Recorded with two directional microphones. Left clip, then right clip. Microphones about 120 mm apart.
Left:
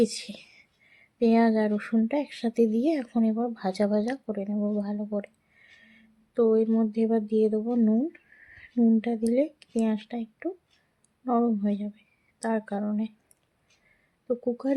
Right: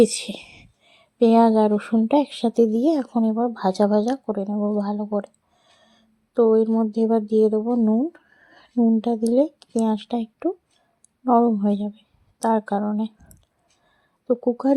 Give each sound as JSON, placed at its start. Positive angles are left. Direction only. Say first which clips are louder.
{"t": 0.0, "sound": "whispering", "louder": "right 8 dB", "side_deg": -50}
{"t": 2.0, "sound": "speech", "louder": "right 9 dB", "side_deg": -45}
{"t": 4.4, "sound": "speech", "louder": "right 6 dB", "side_deg": -15}
{"t": 4.7, "sound": "speech", "louder": "right 7 dB", "side_deg": -30}
{"t": 5.8, "sound": "a sound", "louder": "left 1 dB", "side_deg": -30}
{"t": 6.9, "sound": "speech", "louder": "right 6 dB", "side_deg": -30}
{"t": 7.6, "sound": "speech", "louder": "right 5 dB", "side_deg": -15}
{"t": 9.0, "sound": "speech", "louder": "right 6 dB", "side_deg": -30}
{"t": 10.0, "sound": "speech", "louder": "right 9 dB", "side_deg": -55}
{"t": 11.3, "sound": "speech", "louder": "right 8 dB", "side_deg": -35}
{"t": 14.3, "sound": "speech", "louder": "right 7 dB", "side_deg": -35}